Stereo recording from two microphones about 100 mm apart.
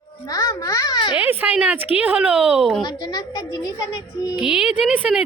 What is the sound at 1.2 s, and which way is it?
Speech, 20° right (ahead or behind).